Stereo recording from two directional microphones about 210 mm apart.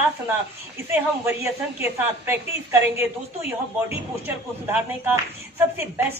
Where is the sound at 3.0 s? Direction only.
30° left (ahead or behind).